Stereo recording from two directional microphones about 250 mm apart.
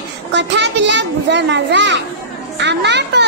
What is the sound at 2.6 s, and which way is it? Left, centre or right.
Children playing, right.